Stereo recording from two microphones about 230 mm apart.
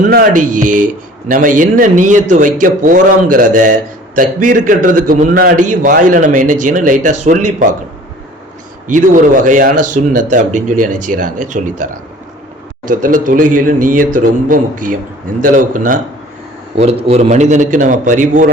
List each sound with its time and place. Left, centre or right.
0.1 s a man's voice: right
8.9 s a man's voice: right
12.9 s a man's voice: right